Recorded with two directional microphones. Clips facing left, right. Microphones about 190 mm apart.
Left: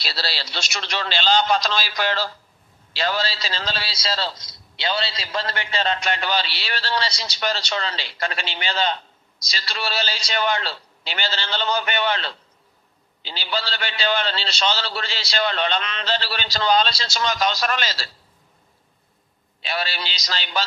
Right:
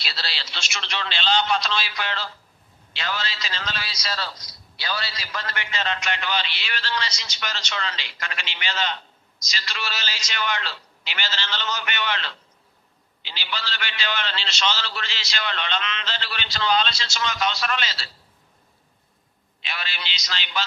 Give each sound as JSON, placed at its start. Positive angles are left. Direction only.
{"t": 0.0, "sound": "a man's voice", "side_deg": 40}
{"t": 19.6, "sound": "a man's voice", "side_deg": 35}